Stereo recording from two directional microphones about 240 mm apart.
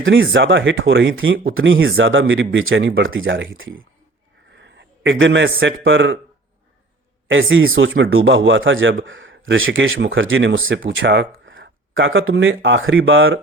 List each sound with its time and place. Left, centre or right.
0.0 s a man's voice: right
7.3 s speech: right